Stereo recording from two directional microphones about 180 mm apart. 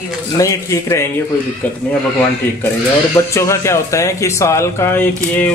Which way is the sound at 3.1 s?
15° left (ahead or behind).